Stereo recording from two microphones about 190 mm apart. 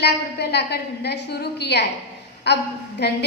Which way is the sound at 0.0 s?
60° left (ahead or behind).